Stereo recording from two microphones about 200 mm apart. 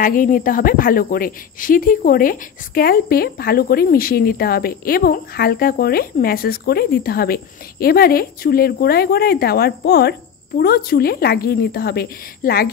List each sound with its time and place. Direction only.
0.0 s a woman's voice: 45° left (ahead or behind)